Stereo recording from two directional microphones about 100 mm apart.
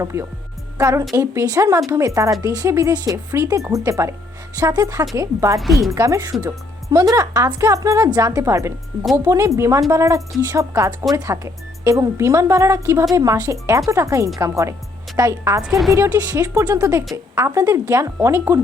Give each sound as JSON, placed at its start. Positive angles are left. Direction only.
{"t": 0.0, "sound": "a woman's voice", "side_deg": -30}
{"t": 5.5, "sound": "a woman's voice", "side_deg": 0}
{"t": 5.9, "sound": "a woman's voice", "side_deg": -30}
{"t": 15.6, "sound": "a woman's voice", "side_deg": -5}
{"t": 16.0, "sound": "a woman's voice", "side_deg": -35}